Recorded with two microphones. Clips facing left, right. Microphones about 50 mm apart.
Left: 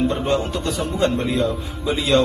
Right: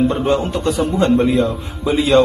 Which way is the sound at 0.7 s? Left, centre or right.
Centre.